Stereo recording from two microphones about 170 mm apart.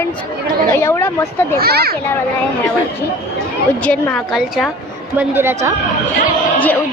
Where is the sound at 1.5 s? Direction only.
65° right (ahead or behind).